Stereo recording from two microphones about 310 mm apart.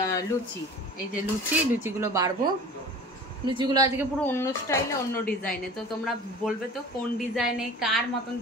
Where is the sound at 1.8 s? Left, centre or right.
Centre.